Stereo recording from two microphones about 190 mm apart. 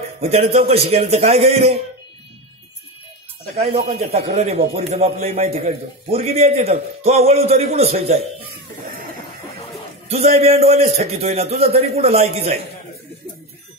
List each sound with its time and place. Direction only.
0.2 s a man's voice: 35° right (ahead or behind)
3.7 s a man's voice: 35° right (ahead or behind)
10.0 s a man's voice: 35° right (ahead or behind)